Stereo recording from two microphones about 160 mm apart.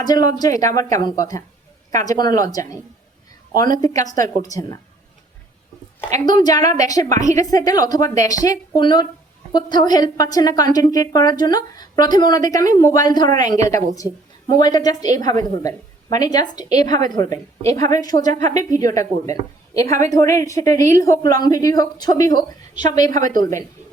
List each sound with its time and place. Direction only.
0.0 s a woman's voice: 25° left (ahead or behind)
3.8 s a woman's voice: 25° left (ahead or behind)
6.2 s a woman's voice: 25° left (ahead or behind)
15.2 s a woman's voice: 50° right (ahead or behind)
15.4 s a woman's voice: 25° left (ahead or behind)
18.3 s a woman's voice: 50° right (ahead or behind)
18.5 s a woman's voice: 20° left (ahead or behind)